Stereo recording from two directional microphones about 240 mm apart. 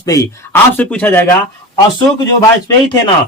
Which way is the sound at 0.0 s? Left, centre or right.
Centre.